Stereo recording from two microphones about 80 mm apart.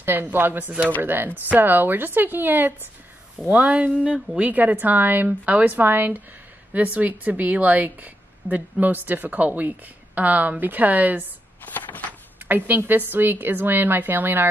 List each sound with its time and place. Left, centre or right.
0.0 s a woman's voice: right
11.6 s a sound: left
12.4 s a woman's voice: right